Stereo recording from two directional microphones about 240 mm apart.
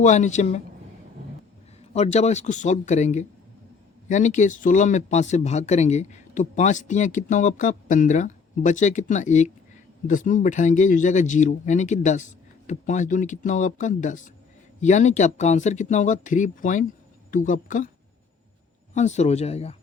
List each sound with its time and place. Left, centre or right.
0.0 s speech: left
1.9 s speech: left
18.9 s speech: left